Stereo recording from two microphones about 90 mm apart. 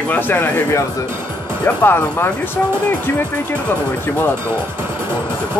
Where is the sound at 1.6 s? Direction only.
25° left (ahead or behind).